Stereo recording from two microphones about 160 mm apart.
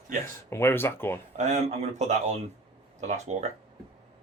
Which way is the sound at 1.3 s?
45° right (ahead or behind).